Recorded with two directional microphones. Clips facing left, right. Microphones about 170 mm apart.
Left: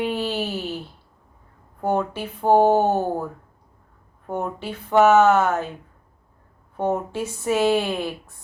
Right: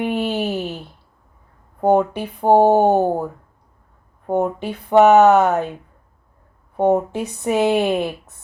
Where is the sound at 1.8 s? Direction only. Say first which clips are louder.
Right 7 dB; 15° right (ahead or behind).